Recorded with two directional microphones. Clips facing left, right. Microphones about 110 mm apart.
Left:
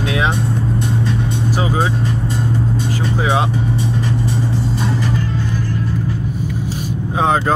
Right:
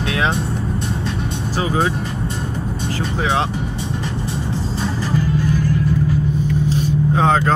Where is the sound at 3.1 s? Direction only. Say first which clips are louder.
Left 2 dB; 10° left (ahead or behind).